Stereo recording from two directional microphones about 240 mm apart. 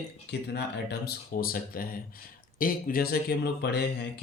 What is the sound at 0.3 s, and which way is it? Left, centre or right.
Speech, left.